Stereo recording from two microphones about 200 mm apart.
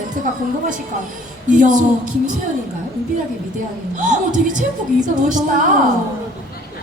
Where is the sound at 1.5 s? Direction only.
40° right (ahead or behind).